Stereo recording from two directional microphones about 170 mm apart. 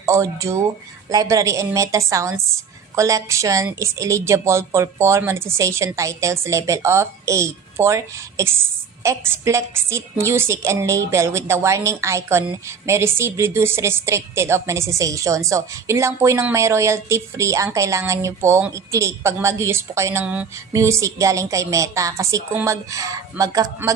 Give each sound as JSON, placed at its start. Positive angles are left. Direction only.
{"t": 0.0, "sound": "a woman's voice", "side_deg": -15}